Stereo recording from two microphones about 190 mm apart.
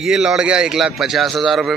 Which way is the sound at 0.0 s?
5° right (ahead or behind).